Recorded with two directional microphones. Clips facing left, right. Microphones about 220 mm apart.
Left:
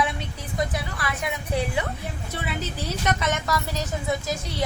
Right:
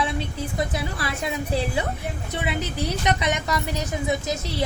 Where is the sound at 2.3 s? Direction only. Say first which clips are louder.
Right 4 dB; 15° right (ahead or behind).